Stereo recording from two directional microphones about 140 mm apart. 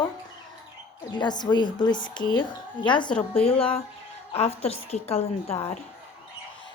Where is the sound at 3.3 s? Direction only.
45° left (ahead or behind).